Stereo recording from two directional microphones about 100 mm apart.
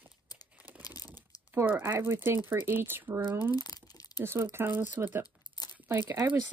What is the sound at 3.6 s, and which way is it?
Crumpling, 40° left (ahead or behind).